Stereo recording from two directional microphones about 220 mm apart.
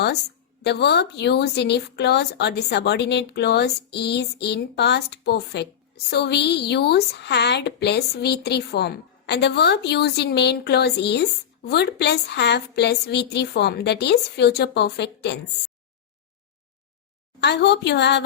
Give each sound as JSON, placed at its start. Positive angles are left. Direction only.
{"t": 0.6, "sound": "a woman's voice", "side_deg": 50}
{"t": 17.4, "sound": "a woman's voice", "side_deg": 50}